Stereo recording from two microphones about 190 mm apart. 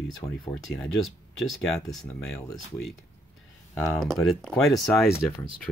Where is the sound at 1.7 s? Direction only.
5° left (ahead or behind).